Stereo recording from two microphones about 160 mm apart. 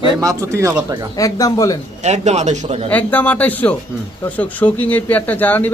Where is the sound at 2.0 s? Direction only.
45° right (ahead or behind).